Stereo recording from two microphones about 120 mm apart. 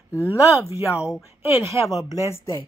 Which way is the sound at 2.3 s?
20° left (ahead or behind).